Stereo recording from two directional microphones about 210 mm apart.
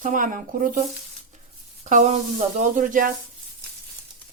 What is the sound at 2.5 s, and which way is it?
Speech, 35° right (ahead or behind).